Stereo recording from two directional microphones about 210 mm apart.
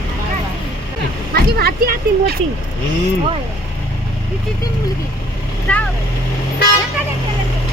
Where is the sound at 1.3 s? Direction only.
45° right (ahead or behind).